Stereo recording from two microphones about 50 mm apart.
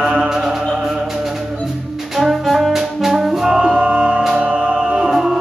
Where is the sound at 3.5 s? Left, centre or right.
Right.